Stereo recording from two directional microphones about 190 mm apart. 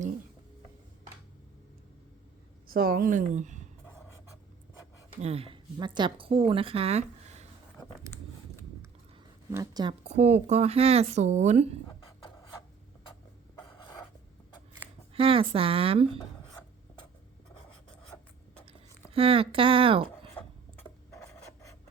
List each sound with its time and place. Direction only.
2.6 s speech: 50° right (ahead or behind)
5.1 s a woman's voice: 30° right (ahead or behind)
9.5 s speech: 20° right (ahead or behind); by 11.7 s 35° right (ahead or behind)
15.1 s a woman's voice: 30° right (ahead or behind)
19.1 s a woman's voice: 30° right (ahead or behind)
20.4 s filing: 10° left (ahead or behind)
20.8 s a sound: 15° left (ahead or behind)